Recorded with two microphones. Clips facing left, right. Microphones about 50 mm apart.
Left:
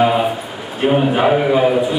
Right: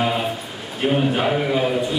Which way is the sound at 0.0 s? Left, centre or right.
Centre.